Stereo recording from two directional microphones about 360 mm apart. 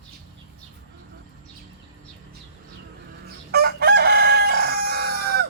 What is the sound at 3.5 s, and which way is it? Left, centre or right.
Chicken, right.